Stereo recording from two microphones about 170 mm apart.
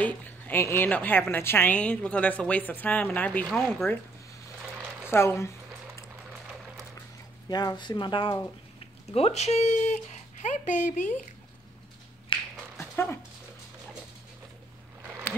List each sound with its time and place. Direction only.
0.0 s a woman's voice: 10° left (ahead or behind)
5.1 s a woman's voice: 15° left (ahead or behind)
7.4 s speech: 25° left (ahead or behind); by 11.1 s 45° left (ahead or behind)
12.3 s a sound: 30° left (ahead or behind)
12.7 s dog: 15° left (ahead or behind)